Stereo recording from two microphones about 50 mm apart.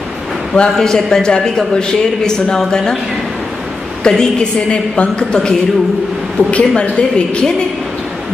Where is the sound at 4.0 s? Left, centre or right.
Centre.